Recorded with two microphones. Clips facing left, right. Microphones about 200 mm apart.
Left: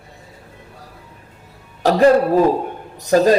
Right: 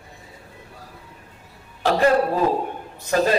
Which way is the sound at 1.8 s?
40° left (ahead or behind).